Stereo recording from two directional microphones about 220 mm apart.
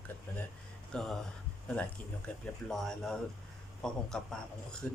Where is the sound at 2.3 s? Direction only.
5° left (ahead or behind).